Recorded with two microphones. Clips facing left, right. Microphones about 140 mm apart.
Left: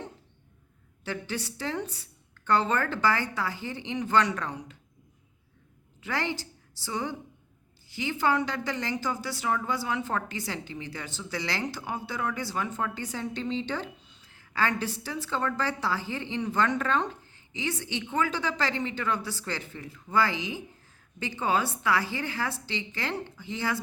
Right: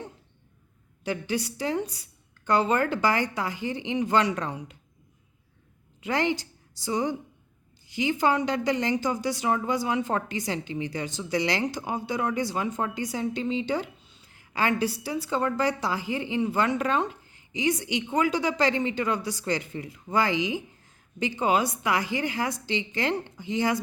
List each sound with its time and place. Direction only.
1.0 s speech: 15° right (ahead or behind)
6.0 s a woman's voice: 20° right (ahead or behind)